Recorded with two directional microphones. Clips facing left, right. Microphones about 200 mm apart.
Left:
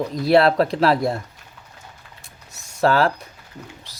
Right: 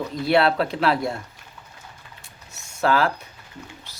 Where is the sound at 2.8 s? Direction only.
35° left (ahead or behind).